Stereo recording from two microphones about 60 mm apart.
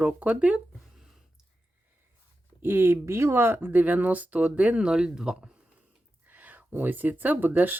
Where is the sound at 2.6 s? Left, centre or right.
Right; by 5.5 s centre.